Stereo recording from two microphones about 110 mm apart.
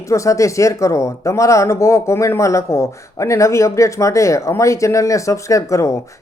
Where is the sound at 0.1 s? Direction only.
30° left (ahead or behind).